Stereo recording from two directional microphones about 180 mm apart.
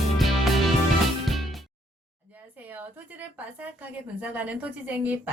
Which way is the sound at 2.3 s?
10° right (ahead or behind).